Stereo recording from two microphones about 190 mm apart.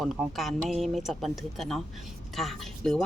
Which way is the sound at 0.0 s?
Centre (ahead or behind).